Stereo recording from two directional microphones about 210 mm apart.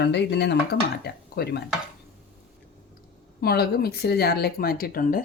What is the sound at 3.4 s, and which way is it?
Speech, 50° left (ahead or behind).